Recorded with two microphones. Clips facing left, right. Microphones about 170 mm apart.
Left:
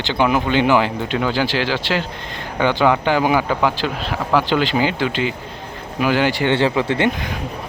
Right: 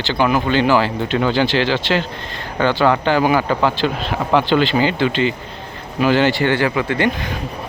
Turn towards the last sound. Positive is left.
turn(degrees=25)  # may be behind; listen again after turning